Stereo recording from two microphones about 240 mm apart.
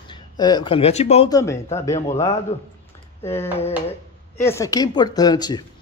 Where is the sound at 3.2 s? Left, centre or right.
Centre.